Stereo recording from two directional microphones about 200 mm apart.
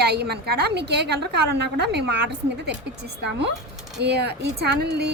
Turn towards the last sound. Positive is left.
turn(degrees=-55)  # may be behind; listen again after turning